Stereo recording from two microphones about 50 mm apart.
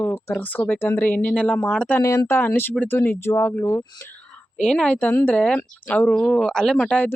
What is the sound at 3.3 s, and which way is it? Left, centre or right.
Speech, left.